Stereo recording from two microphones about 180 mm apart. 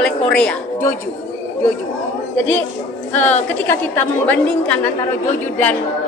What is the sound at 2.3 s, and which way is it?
Speech, 90° left.